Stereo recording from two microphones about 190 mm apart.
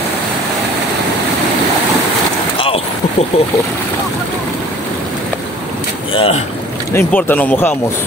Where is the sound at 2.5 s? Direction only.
30° left (ahead or behind).